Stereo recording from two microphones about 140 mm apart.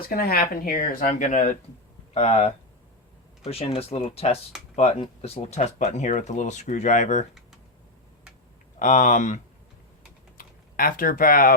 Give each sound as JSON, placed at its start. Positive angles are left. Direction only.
{"t": 0.0, "sound": "speech", "side_deg": 90}
{"t": 2.1, "sound": "speech", "side_deg": 50}
{"t": 8.8, "sound": "speech", "side_deg": 65}
{"t": 10.3, "sound": "speech", "side_deg": 90}